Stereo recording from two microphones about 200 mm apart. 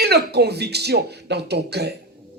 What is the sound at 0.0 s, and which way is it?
A woman's voice, 55° right (ahead or behind).